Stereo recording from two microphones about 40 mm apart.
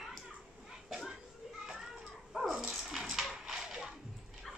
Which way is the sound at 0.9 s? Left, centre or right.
Centre.